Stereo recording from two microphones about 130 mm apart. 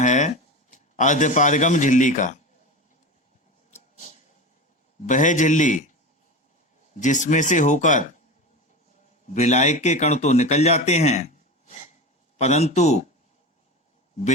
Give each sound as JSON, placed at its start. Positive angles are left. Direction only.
{"t": 0.0, "sound": "a man's voice", "side_deg": 70}
{"t": 3.7, "sound": "a sound", "side_deg": 65}
{"t": 5.0, "sound": "speech", "side_deg": 75}
{"t": 6.9, "sound": "speech", "side_deg": 75}
{"t": 9.3, "sound": "speech", "side_deg": 65}
{"t": 12.4, "sound": "speech", "side_deg": 55}